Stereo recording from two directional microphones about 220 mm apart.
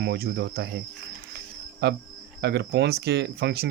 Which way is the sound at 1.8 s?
50° right (ahead or behind).